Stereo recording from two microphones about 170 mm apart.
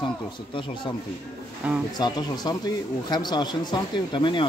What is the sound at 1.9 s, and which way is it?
Speech, 25° left (ahead or behind).